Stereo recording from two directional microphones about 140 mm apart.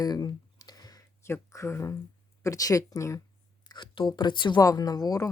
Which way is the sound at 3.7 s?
35° left (ahead or behind).